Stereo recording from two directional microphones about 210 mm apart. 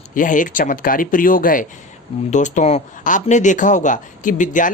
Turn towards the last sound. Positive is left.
turn(degrees=40)  # may be behind; listen again after turning